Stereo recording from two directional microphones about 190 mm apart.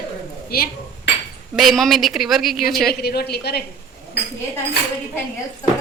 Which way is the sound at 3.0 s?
55° left (ahead or behind).